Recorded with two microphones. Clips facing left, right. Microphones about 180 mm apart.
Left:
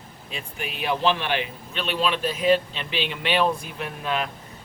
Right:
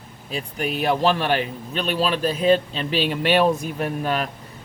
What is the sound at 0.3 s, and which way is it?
A man's voice, 40° right (ahead or behind).